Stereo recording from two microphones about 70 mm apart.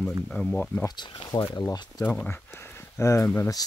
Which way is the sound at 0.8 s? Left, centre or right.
Left.